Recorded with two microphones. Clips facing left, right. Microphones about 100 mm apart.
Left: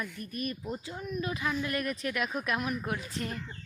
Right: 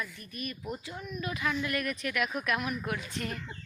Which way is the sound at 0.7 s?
30° left (ahead or behind).